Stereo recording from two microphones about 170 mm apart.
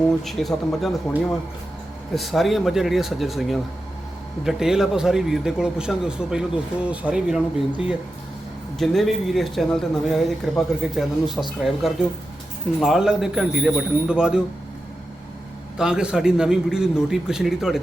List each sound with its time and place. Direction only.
0.3 s speech: centre (ahead or behind)
2.1 s speech: centre (ahead or behind)
8.8 s speech: centre (ahead or behind)
15.8 s speech: 5° right (ahead or behind)